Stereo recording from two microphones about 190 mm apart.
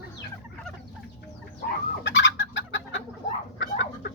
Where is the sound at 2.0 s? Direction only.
75° left (ahead or behind).